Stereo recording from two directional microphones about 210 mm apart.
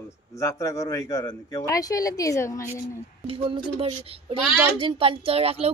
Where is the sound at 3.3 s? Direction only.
25° right (ahead or behind).